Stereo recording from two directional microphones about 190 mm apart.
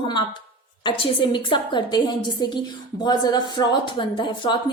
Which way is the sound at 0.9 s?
25° left (ahead or behind).